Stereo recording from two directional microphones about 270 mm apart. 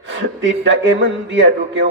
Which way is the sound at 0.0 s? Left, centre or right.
Right.